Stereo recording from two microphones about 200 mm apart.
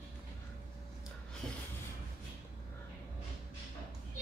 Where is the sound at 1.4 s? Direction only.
5° left (ahead or behind).